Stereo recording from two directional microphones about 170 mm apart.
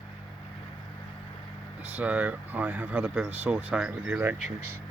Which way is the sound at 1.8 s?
10° right (ahead or behind).